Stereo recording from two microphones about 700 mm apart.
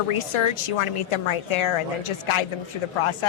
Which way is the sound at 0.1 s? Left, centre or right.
Left.